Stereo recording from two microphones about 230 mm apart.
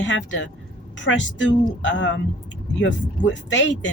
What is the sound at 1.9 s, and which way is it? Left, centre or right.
Speech, left.